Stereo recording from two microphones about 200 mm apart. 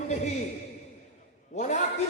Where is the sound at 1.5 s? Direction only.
35° left (ahead or behind).